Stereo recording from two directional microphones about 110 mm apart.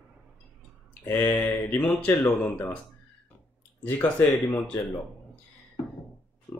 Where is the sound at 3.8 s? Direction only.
15° left (ahead or behind).